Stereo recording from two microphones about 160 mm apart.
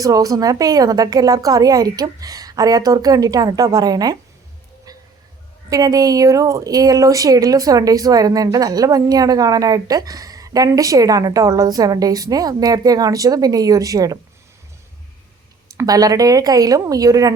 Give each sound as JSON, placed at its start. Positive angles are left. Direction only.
{"t": 0.0, "sound": "a woman's voice", "side_deg": -20}
{"t": 5.7, "sound": "a woman's voice", "side_deg": -20}
{"t": 15.8, "sound": "a woman's voice", "side_deg": -20}